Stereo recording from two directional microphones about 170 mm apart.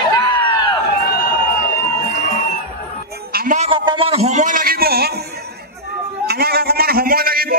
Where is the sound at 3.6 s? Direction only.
30° right (ahead or behind); by 5.2 s 65° right (ahead or behind).